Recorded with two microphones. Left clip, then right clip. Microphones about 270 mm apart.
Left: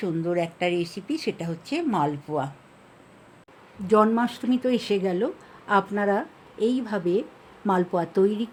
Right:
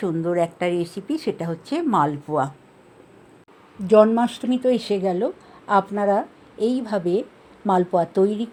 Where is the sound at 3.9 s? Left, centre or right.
Centre.